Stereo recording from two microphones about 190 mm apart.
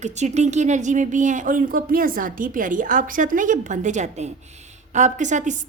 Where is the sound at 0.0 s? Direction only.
35° right (ahead or behind).